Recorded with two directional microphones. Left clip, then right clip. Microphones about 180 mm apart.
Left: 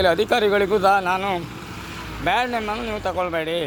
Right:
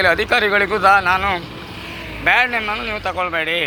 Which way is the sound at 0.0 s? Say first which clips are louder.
Right 3 dB; 50° left (ahead or behind).